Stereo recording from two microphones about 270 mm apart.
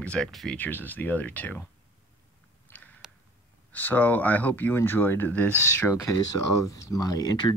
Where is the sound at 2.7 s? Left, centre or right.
Centre.